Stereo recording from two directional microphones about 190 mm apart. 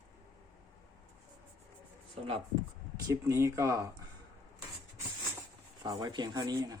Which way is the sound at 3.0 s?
15° right (ahead or behind).